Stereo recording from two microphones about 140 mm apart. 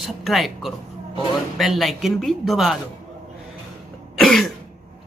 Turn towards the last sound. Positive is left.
turn(degrees=0)  # may be behind; listen again after turning